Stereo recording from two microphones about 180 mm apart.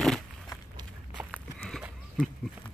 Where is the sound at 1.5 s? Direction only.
Centre (ahead or behind).